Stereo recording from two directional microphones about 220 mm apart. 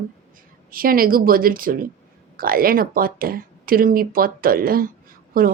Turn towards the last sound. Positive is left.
turn(degrees=-40)  # may be behind; listen again after turning